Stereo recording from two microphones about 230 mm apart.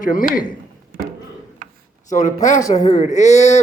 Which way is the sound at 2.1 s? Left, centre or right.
Left.